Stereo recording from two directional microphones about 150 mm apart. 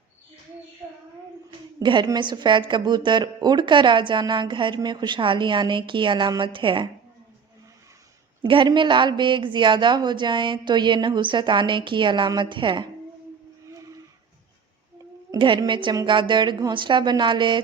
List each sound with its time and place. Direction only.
1.5 s a woman's voice: 30° right (ahead or behind)
8.4 s a woman's voice: 35° right (ahead or behind)
13.7 s a sound: 20° right (ahead or behind)
15.3 s a woman's voice: 30° right (ahead or behind)